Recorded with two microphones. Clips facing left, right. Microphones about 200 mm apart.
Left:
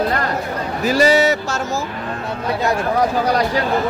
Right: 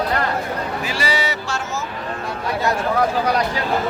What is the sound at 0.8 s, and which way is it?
Speech, 45° left (ahead or behind).